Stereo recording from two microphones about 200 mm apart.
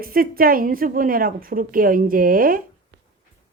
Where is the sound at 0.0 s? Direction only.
45° right (ahead or behind).